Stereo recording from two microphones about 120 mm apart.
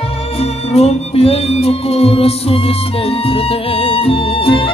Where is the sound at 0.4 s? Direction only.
60° left (ahead or behind).